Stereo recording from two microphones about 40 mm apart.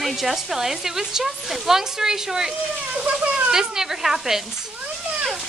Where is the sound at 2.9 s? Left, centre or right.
Right.